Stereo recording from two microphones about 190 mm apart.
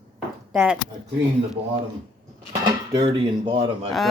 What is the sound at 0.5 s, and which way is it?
Speech, 5° right (ahead or behind).